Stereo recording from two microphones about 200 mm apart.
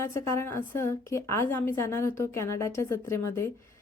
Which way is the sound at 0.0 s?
15° left (ahead or behind).